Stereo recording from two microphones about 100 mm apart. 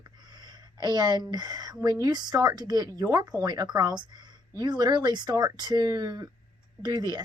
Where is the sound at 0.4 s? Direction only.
45° right (ahead or behind).